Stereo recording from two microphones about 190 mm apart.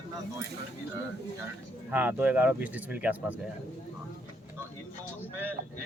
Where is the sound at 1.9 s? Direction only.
10° right (ahead or behind).